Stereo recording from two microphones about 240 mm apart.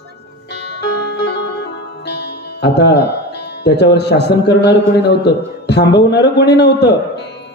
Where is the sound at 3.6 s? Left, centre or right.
Left.